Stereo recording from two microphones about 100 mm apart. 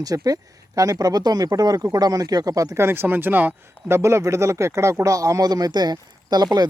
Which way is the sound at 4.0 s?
30° right (ahead or behind).